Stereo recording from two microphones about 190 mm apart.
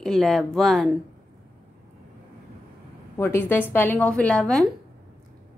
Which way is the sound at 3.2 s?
10° left (ahead or behind).